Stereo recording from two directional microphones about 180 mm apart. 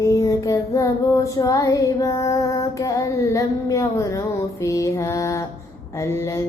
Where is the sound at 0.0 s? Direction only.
20° left (ahead or behind).